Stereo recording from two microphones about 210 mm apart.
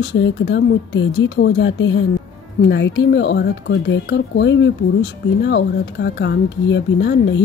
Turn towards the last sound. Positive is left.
turn(degrees=55)  # may be behind; listen again after turning